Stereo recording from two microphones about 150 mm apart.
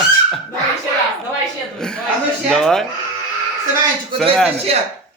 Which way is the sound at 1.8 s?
5° left (ahead or behind).